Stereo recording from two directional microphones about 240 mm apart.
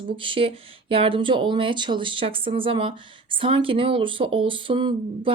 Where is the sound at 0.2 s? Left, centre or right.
Right.